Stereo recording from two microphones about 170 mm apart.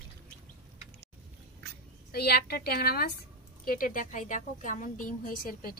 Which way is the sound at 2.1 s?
65° left (ahead or behind).